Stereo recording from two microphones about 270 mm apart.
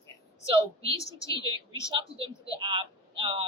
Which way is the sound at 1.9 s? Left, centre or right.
Centre.